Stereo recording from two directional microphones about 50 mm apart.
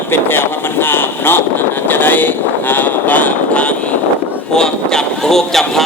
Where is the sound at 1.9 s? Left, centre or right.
Left.